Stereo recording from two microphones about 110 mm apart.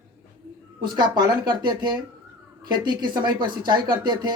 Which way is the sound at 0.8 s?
40° right (ahead or behind).